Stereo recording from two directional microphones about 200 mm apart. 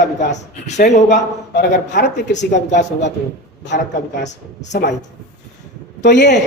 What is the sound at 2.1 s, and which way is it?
Speech, 60° left (ahead or behind).